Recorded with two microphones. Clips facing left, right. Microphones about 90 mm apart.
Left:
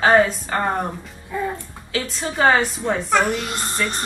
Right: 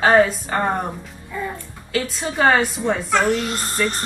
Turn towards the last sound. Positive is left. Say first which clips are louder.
# right 3 dB
turn(degrees=15)  # may be behind; listen again after turning